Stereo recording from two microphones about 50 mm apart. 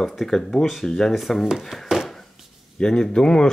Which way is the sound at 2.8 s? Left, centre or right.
Centre.